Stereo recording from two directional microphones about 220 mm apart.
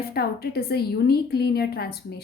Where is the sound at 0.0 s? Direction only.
45° left (ahead or behind).